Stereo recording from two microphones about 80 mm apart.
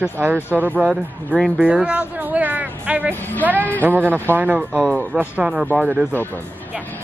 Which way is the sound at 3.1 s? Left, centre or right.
Left.